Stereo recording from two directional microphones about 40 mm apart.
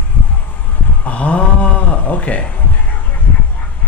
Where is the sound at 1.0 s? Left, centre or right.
Left.